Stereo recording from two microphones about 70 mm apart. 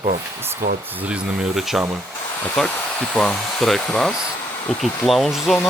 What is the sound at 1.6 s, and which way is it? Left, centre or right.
Speech, centre.